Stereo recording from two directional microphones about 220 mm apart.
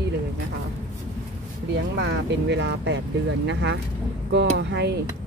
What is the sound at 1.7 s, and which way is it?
Speech, 50° right (ahead or behind).